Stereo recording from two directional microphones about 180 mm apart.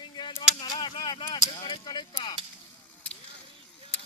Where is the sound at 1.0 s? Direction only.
25° left (ahead or behind).